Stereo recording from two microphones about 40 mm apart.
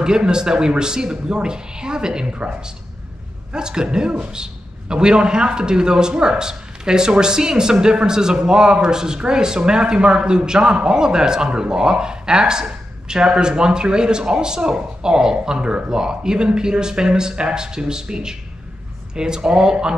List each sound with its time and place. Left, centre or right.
0.0 s a man's voice: centre